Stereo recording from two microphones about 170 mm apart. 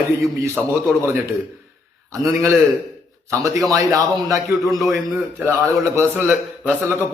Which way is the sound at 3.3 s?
20° right (ahead or behind).